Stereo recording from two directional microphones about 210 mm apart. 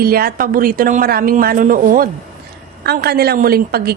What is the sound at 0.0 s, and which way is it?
A woman's voice, 45° right (ahead or behind).